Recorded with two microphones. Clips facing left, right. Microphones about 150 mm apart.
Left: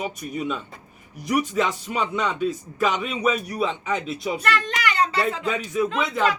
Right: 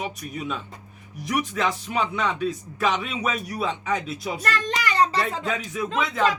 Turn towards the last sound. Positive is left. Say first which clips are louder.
# left 3 dB
turn(degrees=0)  # may be behind; listen again after turning